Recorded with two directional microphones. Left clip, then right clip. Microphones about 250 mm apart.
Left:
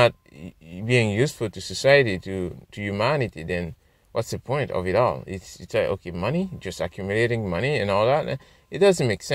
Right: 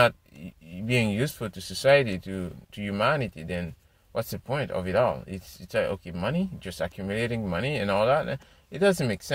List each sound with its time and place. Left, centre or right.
0.8 s speech: left